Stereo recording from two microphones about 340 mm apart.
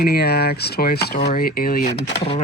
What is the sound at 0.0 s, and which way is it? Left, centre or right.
Speech, left.